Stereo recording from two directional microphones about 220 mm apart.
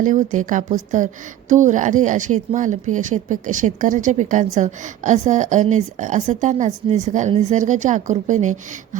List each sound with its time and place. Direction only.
0.0 s a woman's voice: 35° right (ahead or behind)